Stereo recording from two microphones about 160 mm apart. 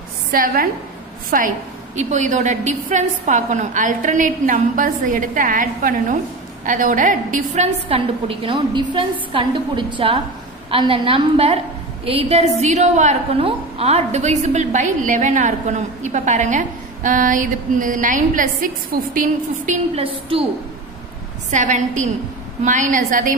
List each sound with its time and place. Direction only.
0.3 s a woman's voice: 65° right (ahead or behind)
20.0 s a woman's voice: 35° right (ahead or behind)
21.5 s a woman's voice: 50° right (ahead or behind)